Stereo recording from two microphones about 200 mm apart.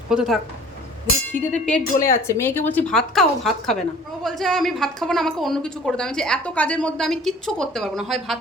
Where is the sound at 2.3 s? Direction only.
10° left (ahead or behind).